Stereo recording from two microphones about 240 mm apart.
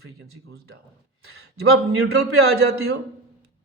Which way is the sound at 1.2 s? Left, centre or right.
Right.